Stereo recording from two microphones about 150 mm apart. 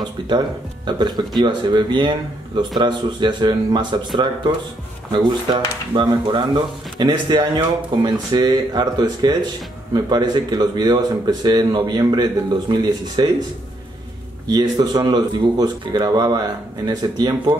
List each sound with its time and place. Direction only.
0.8 s speech: 30° right (ahead or behind)
5.1 s speech: 30° right (ahead or behind)
14.5 s speech: 25° right (ahead or behind)